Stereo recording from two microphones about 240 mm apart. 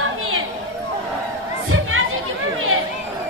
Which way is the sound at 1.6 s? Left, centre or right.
Right.